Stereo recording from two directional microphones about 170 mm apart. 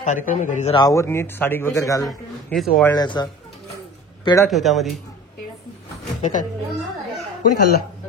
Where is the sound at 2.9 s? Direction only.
25° left (ahead or behind).